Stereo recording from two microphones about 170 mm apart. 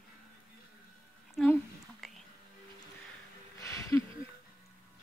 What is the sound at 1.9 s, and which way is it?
Music, centre (ahead or behind).